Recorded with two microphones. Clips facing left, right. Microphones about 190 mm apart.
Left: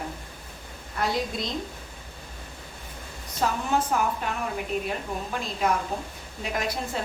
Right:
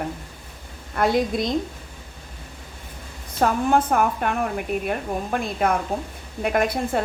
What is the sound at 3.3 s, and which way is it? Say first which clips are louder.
A woman's voice: right 6 dB; 55° right (ahead or behind).